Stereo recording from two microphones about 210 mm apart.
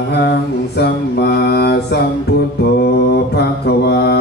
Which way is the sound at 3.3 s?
50° left (ahead or behind).